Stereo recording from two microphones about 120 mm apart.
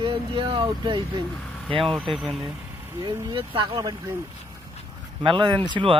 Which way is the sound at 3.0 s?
45° right (ahead or behind).